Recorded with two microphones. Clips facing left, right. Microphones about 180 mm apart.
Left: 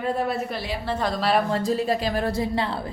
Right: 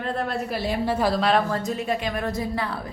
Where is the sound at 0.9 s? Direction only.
10° right (ahead or behind).